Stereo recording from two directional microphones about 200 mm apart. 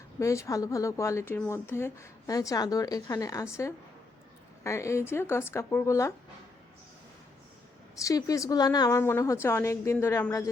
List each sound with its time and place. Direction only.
0.2 s speech: 15° left (ahead or behind)
8.0 s speech: 15° left (ahead or behind)